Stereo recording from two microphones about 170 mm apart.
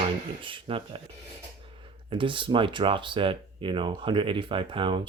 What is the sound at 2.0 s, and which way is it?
Speech, 30° right (ahead or behind).